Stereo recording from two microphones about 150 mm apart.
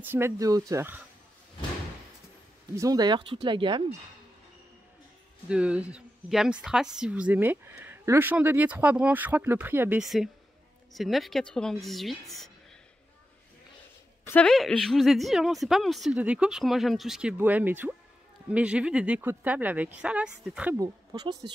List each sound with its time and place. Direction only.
0.0 s speech: 15° right (ahead or behind)
2.7 s speech: 25° right (ahead or behind)
5.5 s speech: 5° right (ahead or behind)
10.0 s a woman's voice: centre (ahead or behind)
14.2 s a woman's voice: 10° left (ahead or behind); by 20.7 s 5° right (ahead or behind)
20.7 s speech: 25° right (ahead or behind)